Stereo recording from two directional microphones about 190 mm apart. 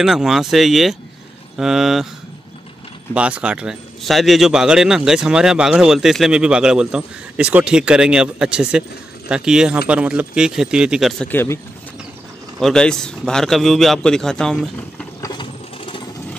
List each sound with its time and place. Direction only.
0.0 s speech: centre (ahead or behind)
3.2 s speech: 5° right (ahead or behind)
15.2 s a sound: 25° left (ahead or behind)